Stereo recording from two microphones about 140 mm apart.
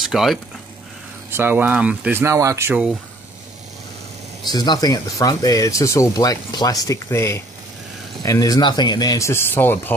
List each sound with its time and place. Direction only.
0.1 s speech: centre (ahead or behind)
1.3 s speech: 15° right (ahead or behind)
4.5 s speech: 30° left (ahead or behind); by 9.9 s 15° left (ahead or behind)